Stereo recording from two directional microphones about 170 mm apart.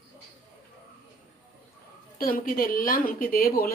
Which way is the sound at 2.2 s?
55° left (ahead or behind).